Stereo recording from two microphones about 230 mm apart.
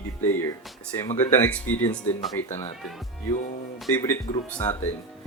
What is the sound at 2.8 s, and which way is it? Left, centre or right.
Speech, centre.